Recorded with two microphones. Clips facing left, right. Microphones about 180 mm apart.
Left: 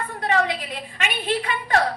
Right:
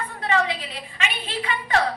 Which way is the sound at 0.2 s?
50° left (ahead or behind).